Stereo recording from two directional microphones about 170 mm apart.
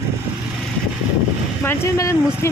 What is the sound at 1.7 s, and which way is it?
Speech, 20° left (ahead or behind).